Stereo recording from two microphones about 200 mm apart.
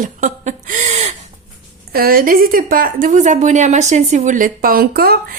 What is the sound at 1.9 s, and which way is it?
Speech, 45° right (ahead or behind).